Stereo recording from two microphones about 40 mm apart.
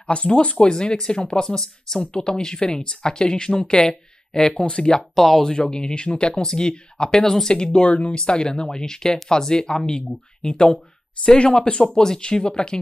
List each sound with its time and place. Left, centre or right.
0.0 s speech: left
5.1 s speech: centre